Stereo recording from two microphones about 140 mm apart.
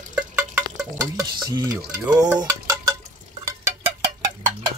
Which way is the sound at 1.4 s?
30° right (ahead or behind).